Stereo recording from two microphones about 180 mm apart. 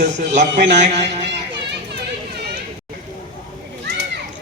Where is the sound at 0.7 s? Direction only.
40° right (ahead or behind).